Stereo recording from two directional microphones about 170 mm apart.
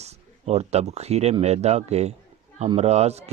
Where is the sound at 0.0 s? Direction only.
40° right (ahead or behind).